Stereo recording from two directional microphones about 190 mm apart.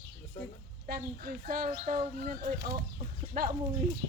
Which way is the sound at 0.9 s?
50° right (ahead or behind).